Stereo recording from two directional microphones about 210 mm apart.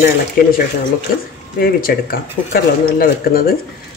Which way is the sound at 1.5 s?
45° left (ahead or behind).